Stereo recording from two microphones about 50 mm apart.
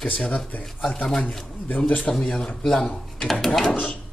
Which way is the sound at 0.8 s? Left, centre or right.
Centre.